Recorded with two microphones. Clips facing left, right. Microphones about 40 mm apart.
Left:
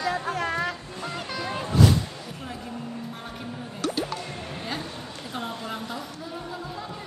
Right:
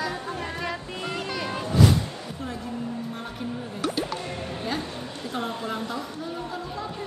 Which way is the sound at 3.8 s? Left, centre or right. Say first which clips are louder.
Even; centre.